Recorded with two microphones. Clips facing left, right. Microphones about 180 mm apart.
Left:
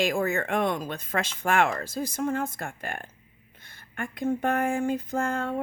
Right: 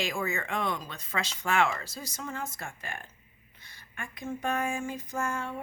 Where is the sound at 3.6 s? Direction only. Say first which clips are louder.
Left 8 dB; 55° left (ahead or behind).